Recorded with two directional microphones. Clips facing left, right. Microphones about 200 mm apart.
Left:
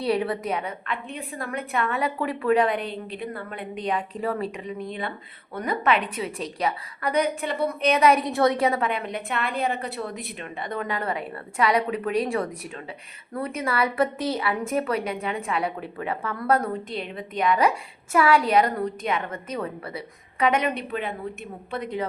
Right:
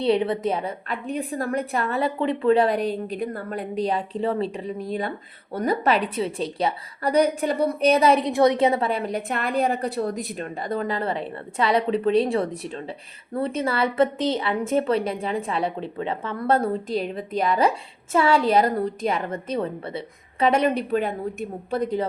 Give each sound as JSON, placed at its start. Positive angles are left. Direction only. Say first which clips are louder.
{"t": 0.0, "sound": "a woman's voice", "louder": "right 4 dB", "side_deg": -25}